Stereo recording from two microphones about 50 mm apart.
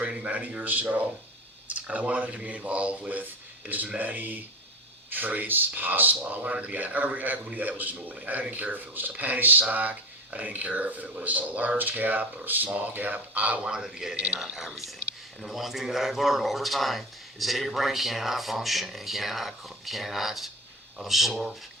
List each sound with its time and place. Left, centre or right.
0.0 s a man's voice: right
13.6 s a man's voice: centre